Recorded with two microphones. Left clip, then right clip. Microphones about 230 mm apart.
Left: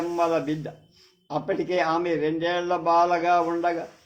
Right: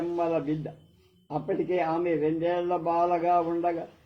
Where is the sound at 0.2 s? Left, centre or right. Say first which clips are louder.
Left 5 dB; left.